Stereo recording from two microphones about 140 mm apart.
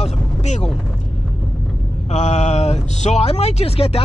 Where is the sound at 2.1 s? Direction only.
55° left (ahead or behind).